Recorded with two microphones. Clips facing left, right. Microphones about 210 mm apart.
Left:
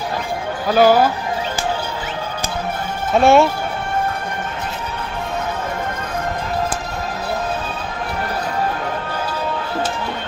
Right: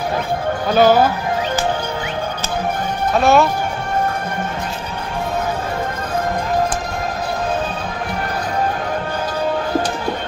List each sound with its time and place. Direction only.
0.7 s speech: 10° left (ahead or behind)
3.2 s speech: 25° left (ahead or behind)